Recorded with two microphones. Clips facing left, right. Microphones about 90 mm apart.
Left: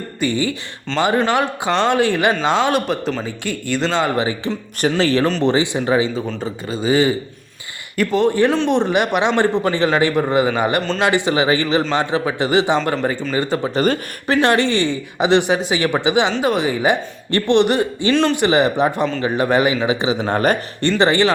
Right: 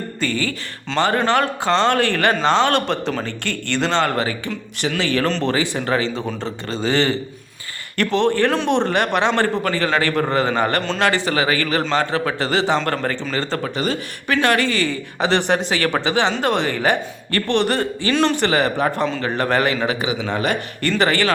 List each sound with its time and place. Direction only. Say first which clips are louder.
0.2 s a man's voice: left 4 dB; 15° left (ahead or behind)
4.9 s speech: left 4 dB; 35° left (ahead or behind)
5.4 s a man's voice: left 4 dB; 20° left (ahead or behind); by 8.8 s centre (ahead or behind)
8.8 s a man's voice: left 1 dB; 10° left (ahead or behind)
13.7 s a man's voice: left 6 dB; 45° left (ahead or behind)
14.4 s a woman's voice: left 2 dB; 25° left (ahead or behind)
18.1 s speech: left 1 dB; centre (ahead or behind)
18.3 s a man's voice: left 3 dB; 15° left (ahead or behind)
20.1 s a man's voice: left 4 dB; 45° left (ahead or behind)
21.0 s a woman's voice: left 3 dB; 20° left (ahead or behind)